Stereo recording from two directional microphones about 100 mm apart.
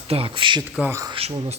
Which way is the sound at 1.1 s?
80° right.